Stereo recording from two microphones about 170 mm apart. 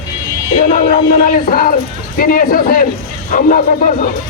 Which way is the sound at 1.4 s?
55° left (ahead or behind).